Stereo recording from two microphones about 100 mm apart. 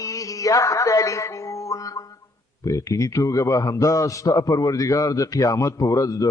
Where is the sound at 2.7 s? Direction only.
35° left (ahead or behind).